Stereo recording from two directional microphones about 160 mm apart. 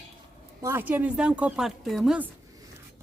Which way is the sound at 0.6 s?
15° right (ahead or behind).